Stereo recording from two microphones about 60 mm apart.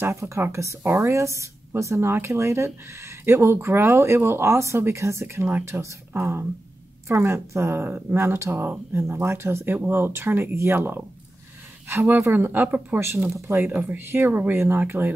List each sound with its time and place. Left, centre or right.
0.0 s speech: right
7.1 s speech: right
14.6 s speech: right